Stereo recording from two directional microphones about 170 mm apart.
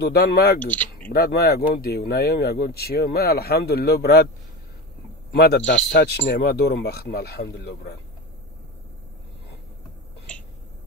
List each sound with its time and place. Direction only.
0.0 s speech: 70° left (ahead or behind)
0.6 s speech: 10° left (ahead or behind)
1.0 s speech: 60° left (ahead or behind)
5.3 s speech: 65° left (ahead or behind)
5.7 s speech: 85° left